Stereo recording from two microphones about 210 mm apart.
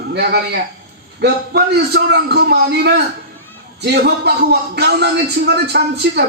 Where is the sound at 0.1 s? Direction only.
50° right (ahead or behind).